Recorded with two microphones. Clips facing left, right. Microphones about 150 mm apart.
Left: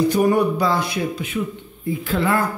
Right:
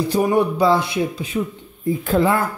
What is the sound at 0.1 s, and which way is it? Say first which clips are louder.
Speech: even; 25° right (ahead or behind).